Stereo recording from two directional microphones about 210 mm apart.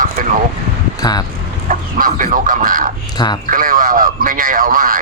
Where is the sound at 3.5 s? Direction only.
40° right (ahead or behind).